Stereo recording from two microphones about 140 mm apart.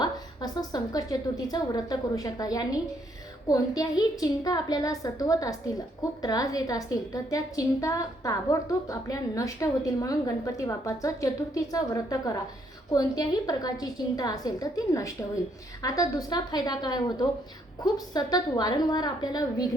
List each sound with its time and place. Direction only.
0.0 s a woman's voice: 30° left (ahead or behind)